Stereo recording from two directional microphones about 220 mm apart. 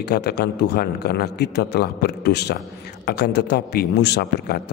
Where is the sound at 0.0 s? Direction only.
45° left (ahead or behind).